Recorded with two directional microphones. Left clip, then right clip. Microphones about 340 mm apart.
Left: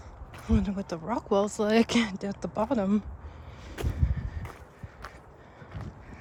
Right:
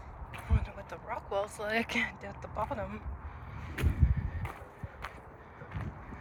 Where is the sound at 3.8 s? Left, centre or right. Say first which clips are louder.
Left 1 dB; centre.